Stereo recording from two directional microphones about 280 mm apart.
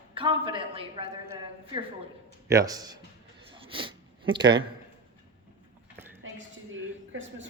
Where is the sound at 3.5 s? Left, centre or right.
Centre.